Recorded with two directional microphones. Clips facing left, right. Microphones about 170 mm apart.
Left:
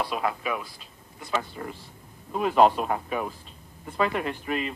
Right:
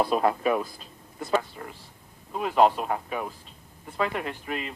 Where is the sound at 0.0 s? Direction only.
40° right (ahead or behind).